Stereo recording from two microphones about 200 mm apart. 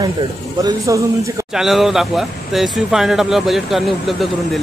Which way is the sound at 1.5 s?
Centre (ahead or behind).